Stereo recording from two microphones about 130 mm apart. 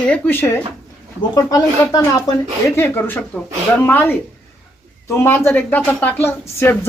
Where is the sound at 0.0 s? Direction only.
15° left (ahead or behind).